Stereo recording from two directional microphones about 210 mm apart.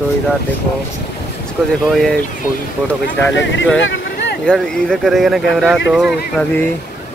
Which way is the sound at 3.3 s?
60° left (ahead or behind).